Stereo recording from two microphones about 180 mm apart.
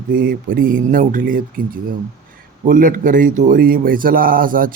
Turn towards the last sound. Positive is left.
turn(degrees=-50)  # may be behind; listen again after turning